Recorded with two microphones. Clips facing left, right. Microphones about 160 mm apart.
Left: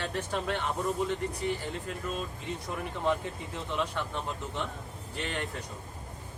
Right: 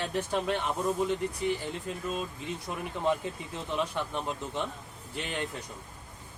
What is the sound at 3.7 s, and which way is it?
Speech, 15° right (ahead or behind).